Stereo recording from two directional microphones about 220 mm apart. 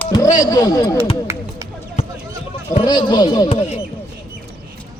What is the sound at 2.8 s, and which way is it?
A man's voice, 20° left (ahead or behind).